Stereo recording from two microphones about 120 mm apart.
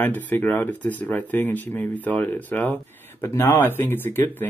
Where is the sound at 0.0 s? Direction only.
15° left (ahead or behind).